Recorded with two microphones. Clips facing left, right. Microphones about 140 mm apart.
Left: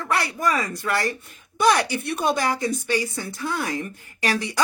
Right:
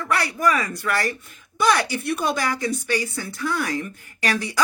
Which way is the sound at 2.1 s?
25° left (ahead or behind).